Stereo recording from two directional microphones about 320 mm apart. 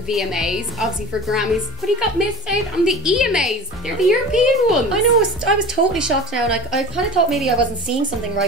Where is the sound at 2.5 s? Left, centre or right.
Centre.